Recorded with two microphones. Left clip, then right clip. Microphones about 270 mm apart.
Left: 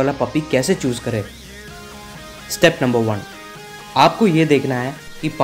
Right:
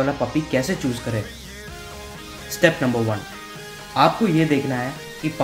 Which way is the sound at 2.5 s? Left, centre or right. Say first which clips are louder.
Left 3 dB; left.